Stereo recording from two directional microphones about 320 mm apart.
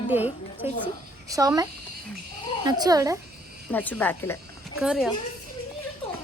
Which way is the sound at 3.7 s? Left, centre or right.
Centre.